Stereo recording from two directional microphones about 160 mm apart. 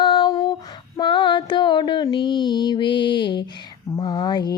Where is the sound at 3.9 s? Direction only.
25° left (ahead or behind).